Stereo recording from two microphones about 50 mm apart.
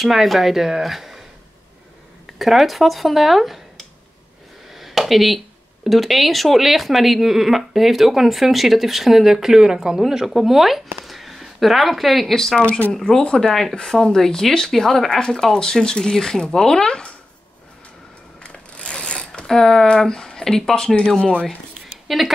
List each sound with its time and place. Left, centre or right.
0.0 s speech: centre
2.3 s speech: centre
4.7 s a sound: centre
5.9 s speech: centre
12.5 s speech: left
12.9 s speech: centre
18.4 s pulleys: left
19.4 s speech: centre
21.2 s speech: left
22.0 s a sound: centre